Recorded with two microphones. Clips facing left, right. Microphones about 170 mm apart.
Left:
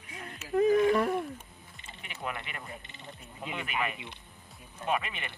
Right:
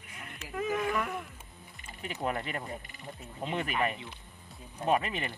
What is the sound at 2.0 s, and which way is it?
Speech, 40° right (ahead or behind).